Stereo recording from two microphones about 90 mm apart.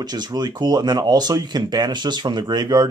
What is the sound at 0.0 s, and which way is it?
Speech, 50° right (ahead or behind).